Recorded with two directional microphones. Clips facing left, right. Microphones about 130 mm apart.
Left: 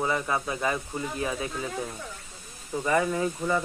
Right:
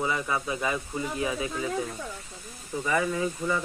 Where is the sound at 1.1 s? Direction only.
10° right (ahead or behind).